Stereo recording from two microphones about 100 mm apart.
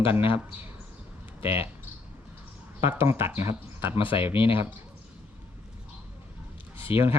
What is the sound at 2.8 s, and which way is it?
Speech, 20° right (ahead or behind).